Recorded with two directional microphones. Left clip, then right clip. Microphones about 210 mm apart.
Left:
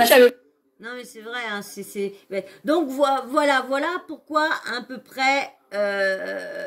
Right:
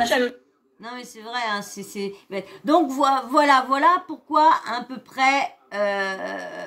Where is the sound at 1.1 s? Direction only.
5° right (ahead or behind).